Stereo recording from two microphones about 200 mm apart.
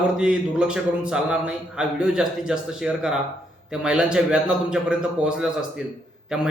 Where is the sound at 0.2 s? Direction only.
5° right (ahead or behind).